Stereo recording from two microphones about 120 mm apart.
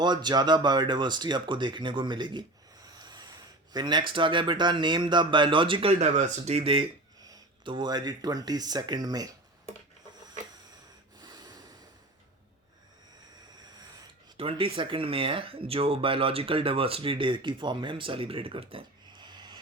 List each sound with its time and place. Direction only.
0.0 s speech: 35° right (ahead or behind)
5.9 s speech: 70° right (ahead or behind); by 6.9 s 50° right (ahead or behind)
7.2 s a sound: 30° right (ahead or behind)
7.7 s speech: 35° right (ahead or behind)
11.2 s snort: 35° right (ahead or behind)
14.3 s speech: 50° right (ahead or behind)
19.1 s a sound: 35° right (ahead or behind)